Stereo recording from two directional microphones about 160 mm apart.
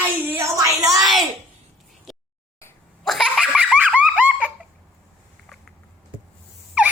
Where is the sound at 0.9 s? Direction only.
Centre (ahead or behind).